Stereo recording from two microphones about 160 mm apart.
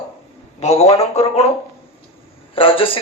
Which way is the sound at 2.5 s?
35° left (ahead or behind).